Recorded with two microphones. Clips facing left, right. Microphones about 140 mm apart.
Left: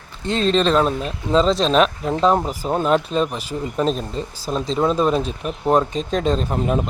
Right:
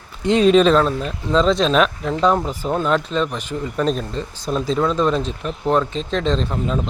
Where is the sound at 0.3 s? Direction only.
15° right (ahead or behind).